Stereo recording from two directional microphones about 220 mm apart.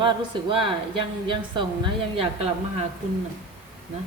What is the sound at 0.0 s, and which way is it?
Speech, 20° right (ahead or behind).